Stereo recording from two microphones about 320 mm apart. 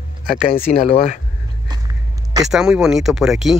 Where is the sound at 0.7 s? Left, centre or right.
Left.